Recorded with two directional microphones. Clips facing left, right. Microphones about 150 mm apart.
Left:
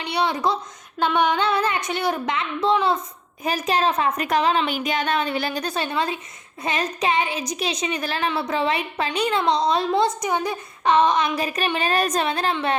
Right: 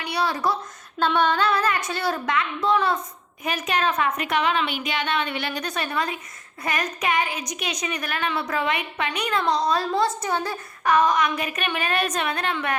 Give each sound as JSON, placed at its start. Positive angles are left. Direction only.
{"t": 0.0, "sound": "speech", "side_deg": 20}
{"t": 3.4, "sound": "a woman's voice", "side_deg": 35}